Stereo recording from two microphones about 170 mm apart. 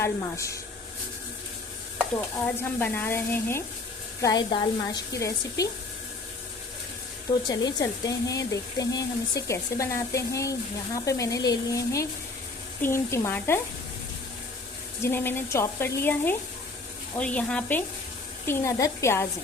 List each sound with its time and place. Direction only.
0.0 s speech: 20° left (ahead or behind)
2.6 s speech: 15° left (ahead or behind)
7.3 s speech: 25° left (ahead or behind)
15.0 s speech: 15° left (ahead or behind)